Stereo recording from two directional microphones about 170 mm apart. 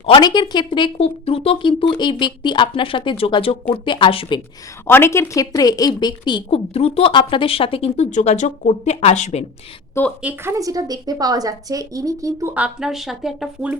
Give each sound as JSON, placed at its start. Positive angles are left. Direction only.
{"t": 0.0, "sound": "a woman's voice", "side_deg": 30}
{"t": 4.9, "sound": "a woman's voice", "side_deg": 15}
{"t": 10.2, "sound": "a woman's voice", "side_deg": -15}